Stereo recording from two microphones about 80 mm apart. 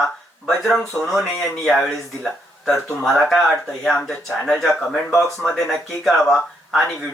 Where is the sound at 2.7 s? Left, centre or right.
Centre.